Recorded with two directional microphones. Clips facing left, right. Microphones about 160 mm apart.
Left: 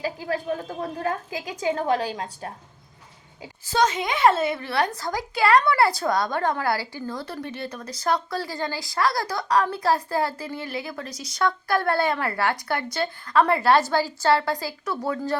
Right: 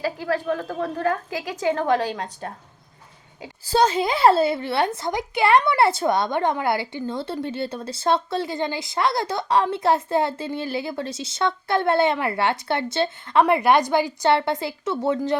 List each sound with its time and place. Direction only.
0.0 s a woman's voice: 40° right (ahead or behind)
0.4 s a woman's voice: 60° right (ahead or behind); by 2.0 s 40° right (ahead or behind)
3.7 s a woman's voice: 30° right (ahead or behind)